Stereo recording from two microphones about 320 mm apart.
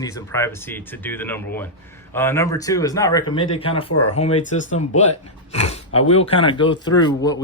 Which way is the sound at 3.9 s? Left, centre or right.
Left.